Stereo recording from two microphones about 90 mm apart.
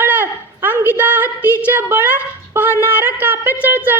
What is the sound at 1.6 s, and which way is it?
A woman's voice, 20° right (ahead or behind).